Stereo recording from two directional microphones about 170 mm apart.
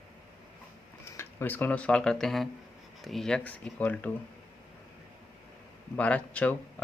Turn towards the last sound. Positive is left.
turn(degrees=10)  # may be behind; listen again after turning